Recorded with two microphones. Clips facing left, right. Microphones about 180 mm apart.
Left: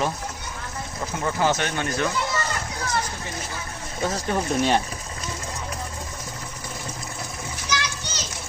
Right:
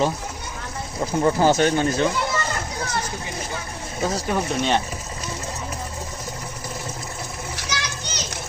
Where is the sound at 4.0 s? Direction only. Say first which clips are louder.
Right 2 dB; 10° right (ahead or behind).